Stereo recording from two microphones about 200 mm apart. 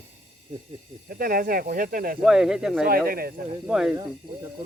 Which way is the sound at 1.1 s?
50° right (ahead or behind).